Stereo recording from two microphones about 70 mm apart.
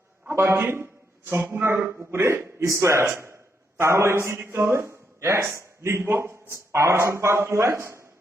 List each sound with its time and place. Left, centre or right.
0.3 s a man's voice: right